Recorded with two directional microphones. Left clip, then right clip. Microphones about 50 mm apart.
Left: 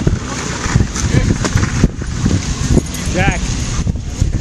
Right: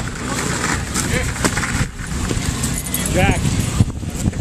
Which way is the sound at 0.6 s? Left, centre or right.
Centre.